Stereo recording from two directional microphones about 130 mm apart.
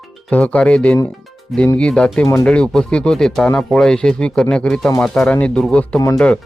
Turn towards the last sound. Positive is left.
turn(degrees=10)  # may be behind; listen again after turning